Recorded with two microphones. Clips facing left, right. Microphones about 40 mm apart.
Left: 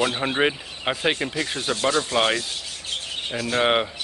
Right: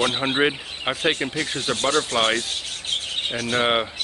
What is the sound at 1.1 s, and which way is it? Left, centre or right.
Speech, centre.